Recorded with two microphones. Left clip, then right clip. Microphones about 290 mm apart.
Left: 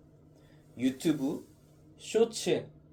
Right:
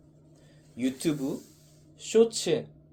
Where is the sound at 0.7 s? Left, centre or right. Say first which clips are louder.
Right 1 dB; right.